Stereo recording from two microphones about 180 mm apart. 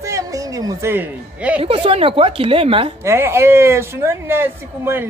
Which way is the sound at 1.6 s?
30° right (ahead or behind).